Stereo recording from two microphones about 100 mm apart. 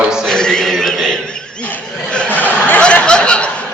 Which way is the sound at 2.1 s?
15° left (ahead or behind).